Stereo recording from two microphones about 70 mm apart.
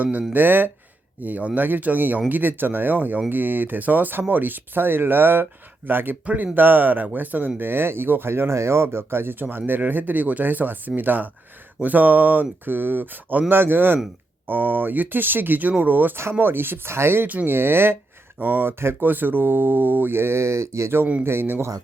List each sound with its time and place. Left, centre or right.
0.0 s speech: right
21.0 s speech: centre
21.2 s speech: right